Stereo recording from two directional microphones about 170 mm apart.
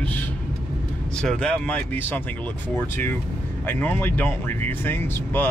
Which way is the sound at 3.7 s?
10° left (ahead or behind).